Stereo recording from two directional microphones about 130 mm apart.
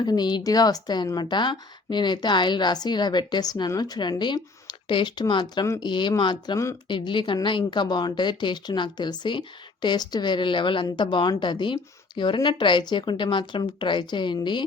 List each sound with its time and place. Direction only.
0.0 s a woman's voice: 35° left (ahead or behind)